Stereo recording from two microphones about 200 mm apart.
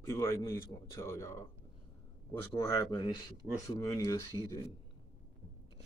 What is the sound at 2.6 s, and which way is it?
Speech, 20° left (ahead or behind).